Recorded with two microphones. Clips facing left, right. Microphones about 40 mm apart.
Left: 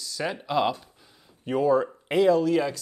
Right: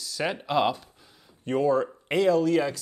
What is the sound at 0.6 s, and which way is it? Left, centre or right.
Speech, centre.